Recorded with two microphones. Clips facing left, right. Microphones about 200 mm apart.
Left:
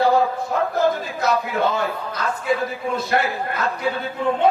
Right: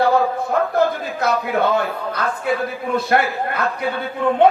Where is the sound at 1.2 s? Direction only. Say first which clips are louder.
Right 2 dB; 55° right (ahead or behind).